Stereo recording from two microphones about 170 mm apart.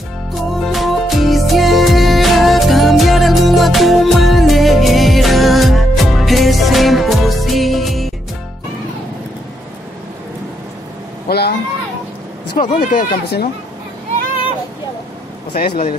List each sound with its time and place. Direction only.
0.3 s music: centre (ahead or behind)
11.2 s a sound: 70° left (ahead or behind)
12.5 s speech: 55° left (ahead or behind)
15.5 s speech: 60° left (ahead or behind)